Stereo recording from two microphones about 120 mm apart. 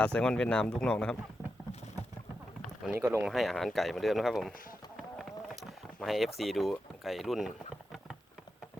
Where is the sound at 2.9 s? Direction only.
20° right (ahead or behind).